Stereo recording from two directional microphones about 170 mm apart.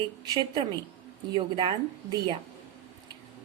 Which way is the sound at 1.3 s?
30° right (ahead or behind).